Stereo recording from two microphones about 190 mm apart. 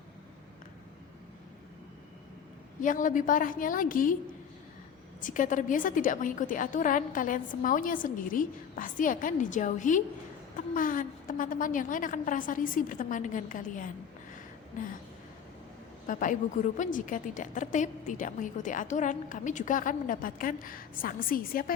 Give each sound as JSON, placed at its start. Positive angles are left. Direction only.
{"t": 2.8, "sound": "a woman's voice", "side_deg": 45}
{"t": 5.2, "sound": "a woman's voice", "side_deg": 45}
{"t": 16.0, "sound": "a woman's voice", "side_deg": 45}